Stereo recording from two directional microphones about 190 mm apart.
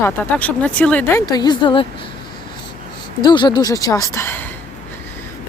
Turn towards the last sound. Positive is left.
turn(degrees=10)  # may be behind; listen again after turning